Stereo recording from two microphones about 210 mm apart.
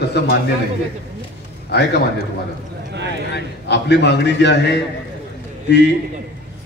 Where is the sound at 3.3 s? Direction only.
55° left (ahead or behind).